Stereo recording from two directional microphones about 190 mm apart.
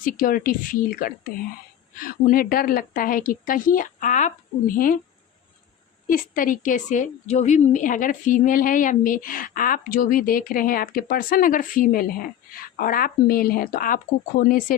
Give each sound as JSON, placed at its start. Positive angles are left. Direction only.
{"t": 0.0, "sound": "a woman's voice", "side_deg": 45}
{"t": 6.1, "sound": "a woman's voice", "side_deg": 45}